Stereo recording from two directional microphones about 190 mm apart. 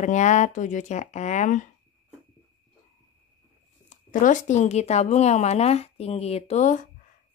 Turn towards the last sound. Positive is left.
turn(degrees=40)  # may be behind; listen again after turning